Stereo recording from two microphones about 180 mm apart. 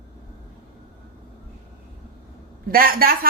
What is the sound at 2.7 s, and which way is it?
Speech, 55° right (ahead or behind).